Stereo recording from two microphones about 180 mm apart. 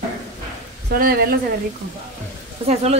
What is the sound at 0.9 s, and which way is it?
Speech, 55° right (ahead or behind).